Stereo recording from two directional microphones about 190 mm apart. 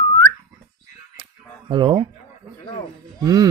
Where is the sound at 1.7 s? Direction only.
25° right (ahead or behind).